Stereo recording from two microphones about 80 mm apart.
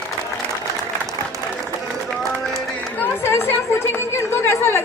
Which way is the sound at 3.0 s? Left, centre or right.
Left.